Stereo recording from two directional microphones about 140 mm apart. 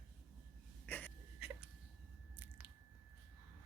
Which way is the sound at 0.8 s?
15° left (ahead or behind).